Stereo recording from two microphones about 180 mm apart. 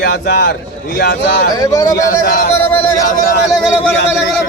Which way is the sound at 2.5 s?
10° left (ahead or behind).